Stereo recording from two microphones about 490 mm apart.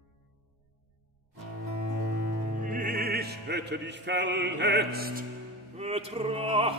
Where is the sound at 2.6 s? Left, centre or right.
Centre.